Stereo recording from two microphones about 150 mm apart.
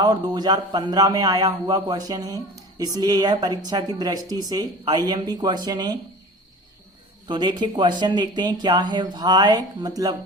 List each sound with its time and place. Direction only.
0.0 s a man's voice: 25° right (ahead or behind)
7.3 s a man's voice: 30° right (ahead or behind)